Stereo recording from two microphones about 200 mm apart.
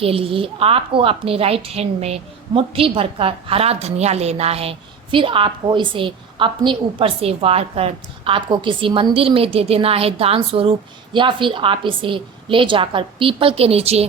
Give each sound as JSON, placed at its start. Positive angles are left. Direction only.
{"t": 0.0, "sound": "a woman's voice", "side_deg": -30}